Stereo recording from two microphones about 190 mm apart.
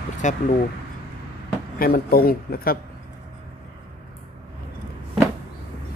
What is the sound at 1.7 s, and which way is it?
Speech, 50° left (ahead or behind).